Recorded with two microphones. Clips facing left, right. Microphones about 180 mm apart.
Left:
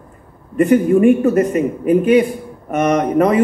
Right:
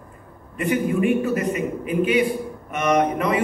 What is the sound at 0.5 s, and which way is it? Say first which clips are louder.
A man's voice: left 9 dB; 45° left (ahead or behind).